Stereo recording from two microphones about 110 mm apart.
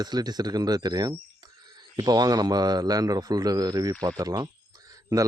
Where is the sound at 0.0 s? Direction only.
40° right (ahead or behind).